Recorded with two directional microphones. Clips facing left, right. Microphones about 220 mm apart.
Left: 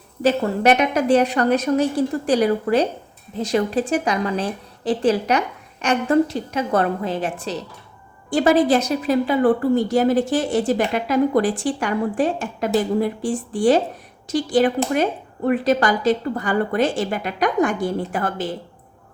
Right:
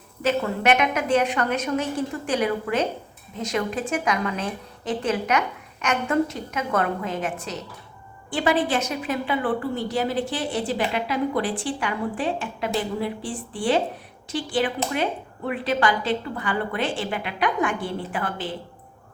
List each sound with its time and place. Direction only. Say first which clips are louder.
0.2 s a woman's voice: left 5 dB; 35° left (ahead or behind)
8.3 s a woman's voice: left 7 dB; 40° left (ahead or behind)